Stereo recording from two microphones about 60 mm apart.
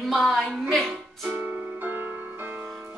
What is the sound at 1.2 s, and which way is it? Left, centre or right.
Music, right.